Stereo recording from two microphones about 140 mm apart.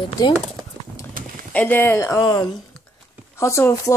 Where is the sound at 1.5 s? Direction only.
10° left (ahead or behind).